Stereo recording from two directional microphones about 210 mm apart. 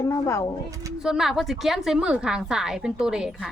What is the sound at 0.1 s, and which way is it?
Speech, 15° left (ahead or behind).